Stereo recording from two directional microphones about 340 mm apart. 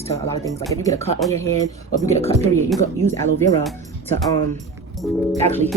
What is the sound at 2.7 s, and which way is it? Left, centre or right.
Speech, centre.